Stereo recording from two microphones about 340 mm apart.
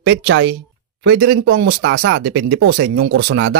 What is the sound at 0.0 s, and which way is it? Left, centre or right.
Speech, right.